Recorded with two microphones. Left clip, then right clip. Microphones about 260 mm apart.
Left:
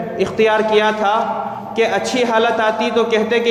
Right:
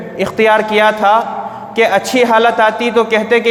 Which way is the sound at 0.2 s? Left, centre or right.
Right.